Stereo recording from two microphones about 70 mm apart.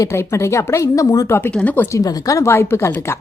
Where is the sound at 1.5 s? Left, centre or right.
Left.